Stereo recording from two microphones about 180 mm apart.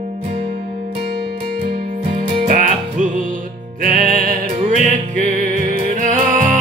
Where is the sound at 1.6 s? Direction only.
55° right (ahead or behind).